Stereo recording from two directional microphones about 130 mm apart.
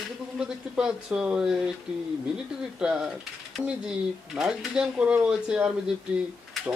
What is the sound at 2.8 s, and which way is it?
Speech, 5° right (ahead or behind).